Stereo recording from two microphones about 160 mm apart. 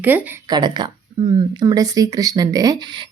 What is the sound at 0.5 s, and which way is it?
Speech, 25° right (ahead or behind).